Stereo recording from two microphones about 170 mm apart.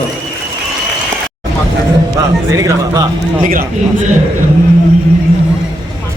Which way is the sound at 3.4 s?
55° right (ahead or behind).